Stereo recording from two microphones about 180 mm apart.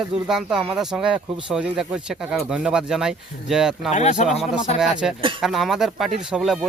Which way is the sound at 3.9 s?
40° left (ahead or behind).